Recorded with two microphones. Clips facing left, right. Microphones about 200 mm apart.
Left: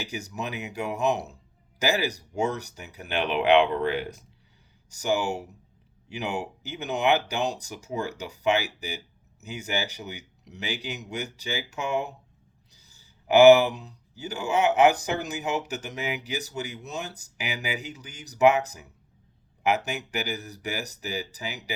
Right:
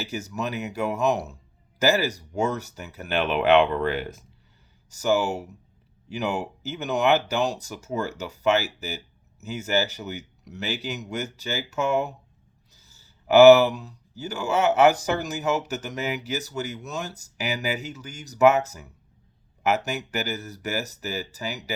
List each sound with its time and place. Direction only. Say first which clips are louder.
0.0 s speech: right 3 dB; 15° left (ahead or behind)
1.1 s speech: right 2 dB; centre (ahead or behind)
1.8 s speech: right 4 dB; 15° left (ahead or behind)
12.7 s a sound: right 2 dB; 15° left (ahead or behind)
14.2 s speech: right 1 dB; 15° left (ahead or behind)